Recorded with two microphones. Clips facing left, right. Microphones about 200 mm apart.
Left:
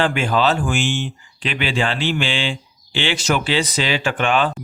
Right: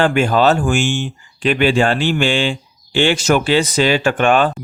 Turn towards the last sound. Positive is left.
turn(degrees=-50)  # may be behind; listen again after turning